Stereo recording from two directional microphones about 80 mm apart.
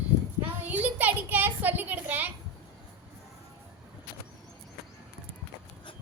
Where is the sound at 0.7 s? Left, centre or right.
Right.